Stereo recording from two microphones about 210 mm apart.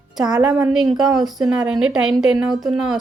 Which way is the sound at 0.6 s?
Centre (ahead or behind).